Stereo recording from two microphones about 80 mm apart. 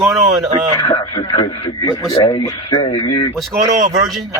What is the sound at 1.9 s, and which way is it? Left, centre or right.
Speech, left.